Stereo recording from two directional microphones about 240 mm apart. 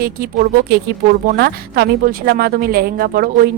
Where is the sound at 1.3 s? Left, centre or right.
Right.